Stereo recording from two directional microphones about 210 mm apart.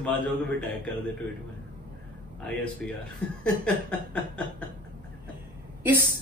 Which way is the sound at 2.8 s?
5° left (ahead or behind).